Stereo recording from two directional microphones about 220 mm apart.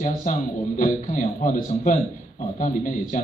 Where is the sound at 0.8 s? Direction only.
35° left (ahead or behind).